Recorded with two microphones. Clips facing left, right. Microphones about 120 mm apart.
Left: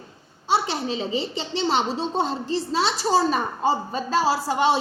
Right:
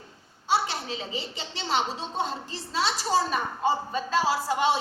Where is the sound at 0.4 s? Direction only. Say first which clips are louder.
Left 4 dB; 25° left (ahead or behind).